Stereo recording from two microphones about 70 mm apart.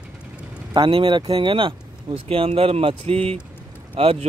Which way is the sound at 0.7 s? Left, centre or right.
Right.